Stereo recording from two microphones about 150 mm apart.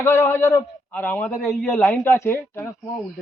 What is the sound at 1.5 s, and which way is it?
Speech, centre (ahead or behind).